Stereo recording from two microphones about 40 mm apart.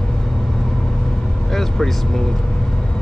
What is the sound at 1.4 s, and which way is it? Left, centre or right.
Vehicle, centre.